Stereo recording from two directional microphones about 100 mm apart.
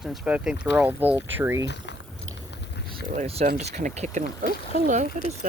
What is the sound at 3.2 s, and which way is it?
Speech, 90° right.